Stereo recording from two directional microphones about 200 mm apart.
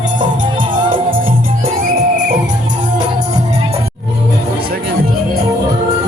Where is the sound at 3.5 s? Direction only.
30° right (ahead or behind).